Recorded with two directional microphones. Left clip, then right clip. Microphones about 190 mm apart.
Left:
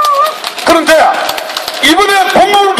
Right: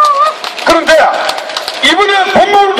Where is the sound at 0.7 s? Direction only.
45° left (ahead or behind).